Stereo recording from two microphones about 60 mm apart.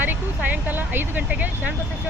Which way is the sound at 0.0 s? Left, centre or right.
Right.